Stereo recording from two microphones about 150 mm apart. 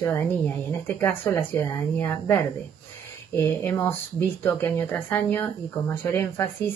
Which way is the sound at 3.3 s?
15° left (ahead or behind).